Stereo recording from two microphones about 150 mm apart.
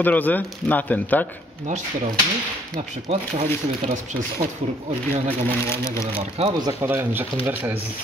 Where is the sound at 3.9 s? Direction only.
60° right (ahead or behind).